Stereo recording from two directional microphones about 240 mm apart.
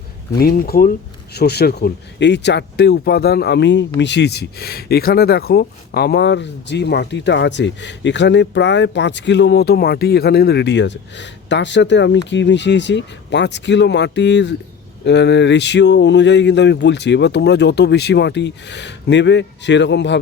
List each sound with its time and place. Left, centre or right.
0.3 s speech: left